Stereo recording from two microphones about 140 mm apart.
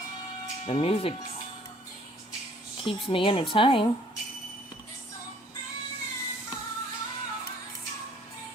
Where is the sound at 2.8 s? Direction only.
40° left (ahead or behind).